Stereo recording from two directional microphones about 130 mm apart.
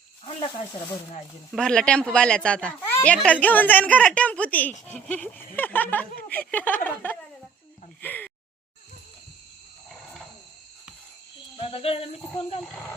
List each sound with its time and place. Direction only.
1.5 s speech: 5° left (ahead or behind)
11.5 s cricket: 45° left (ahead or behind)